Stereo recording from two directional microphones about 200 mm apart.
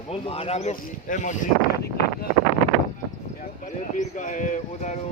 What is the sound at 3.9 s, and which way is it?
Speech, 40° left (ahead or behind).